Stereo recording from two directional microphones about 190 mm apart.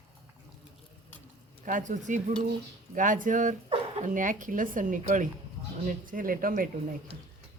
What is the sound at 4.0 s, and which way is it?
Speech, 45° right (ahead or behind).